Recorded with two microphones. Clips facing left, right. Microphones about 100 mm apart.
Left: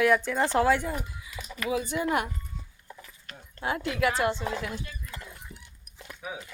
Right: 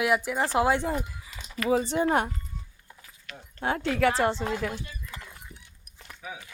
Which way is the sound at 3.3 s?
45° left (ahead or behind).